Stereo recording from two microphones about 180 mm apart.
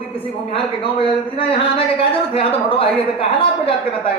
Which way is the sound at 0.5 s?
30° left (ahead or behind).